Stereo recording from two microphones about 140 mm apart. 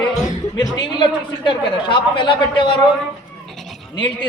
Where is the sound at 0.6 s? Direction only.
30° left (ahead or behind).